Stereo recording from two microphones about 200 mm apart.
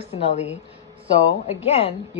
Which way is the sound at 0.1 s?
30° left (ahead or behind).